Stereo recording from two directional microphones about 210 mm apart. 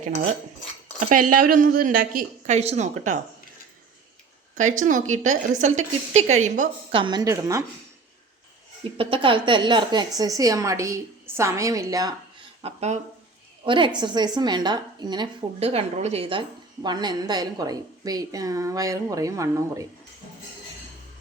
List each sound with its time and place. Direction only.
0.9 s a woman's voice: 40° right (ahead or behind)
4.5 s a woman's voice: 35° right (ahead or behind)
7.0 s a woman's voice: 20° right (ahead or behind)
8.8 s a woman's voice: 25° right (ahead or behind)
12.6 s a woman's voice: 30° right (ahead or behind); by 19.9 s 15° right (ahead or behind)